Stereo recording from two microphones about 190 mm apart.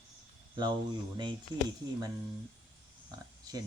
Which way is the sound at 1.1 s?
25° right (ahead or behind).